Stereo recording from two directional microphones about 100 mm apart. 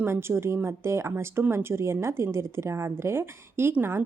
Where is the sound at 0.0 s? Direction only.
25° right (ahead or behind).